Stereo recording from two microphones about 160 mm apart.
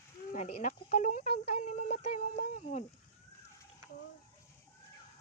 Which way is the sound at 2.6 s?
45° left (ahead or behind).